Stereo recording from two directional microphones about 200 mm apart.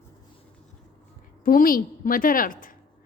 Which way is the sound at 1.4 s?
45° left (ahead or behind).